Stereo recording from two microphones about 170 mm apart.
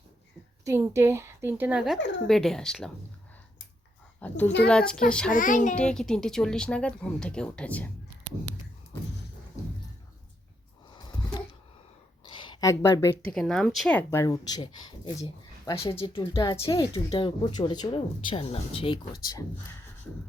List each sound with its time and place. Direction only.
0.6 s a woman's voice: 15° right (ahead or behind); by 2.9 s 5° left (ahead or behind)
4.2 s a woman's voice: 10° left (ahead or behind)
5.3 s a child's voice: 50° left (ahead or behind)
5.7 s speech: 5° left (ahead or behind)
10.9 s a sound: 25° left (ahead or behind)
13.3 s speech: centre (ahead or behind); by 19.5 s 25° left (ahead or behind)